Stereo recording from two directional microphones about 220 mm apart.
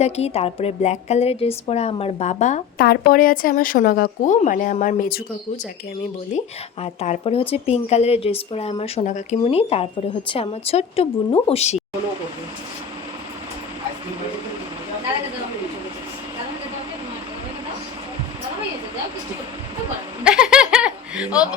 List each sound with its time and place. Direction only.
0.0 s speech: 30° left (ahead or behind)
2.8 s speech: 45° left (ahead or behind)
6.3 s speech: 30° left (ahead or behind)
20.2 s laughter: 5° right (ahead or behind)